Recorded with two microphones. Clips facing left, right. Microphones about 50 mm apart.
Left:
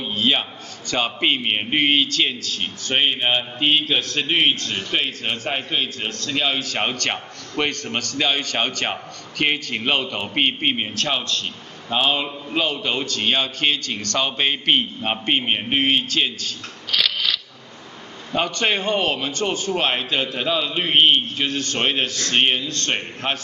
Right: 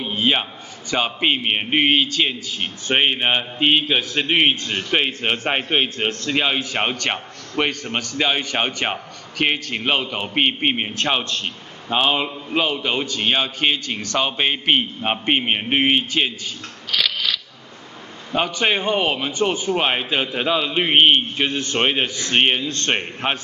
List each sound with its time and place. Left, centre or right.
0.0 s a man's voice: centre
11.0 s a man's voice: right
11.9 s a man's voice: centre
16.9 s scissors: centre
18.3 s a man's voice: centre
22.7 s a man's voice: right